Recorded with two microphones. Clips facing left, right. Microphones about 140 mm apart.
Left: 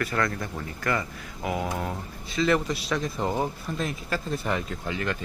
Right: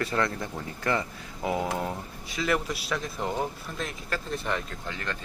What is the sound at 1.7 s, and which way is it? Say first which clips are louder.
Speech: even; 10° right (ahead or behind).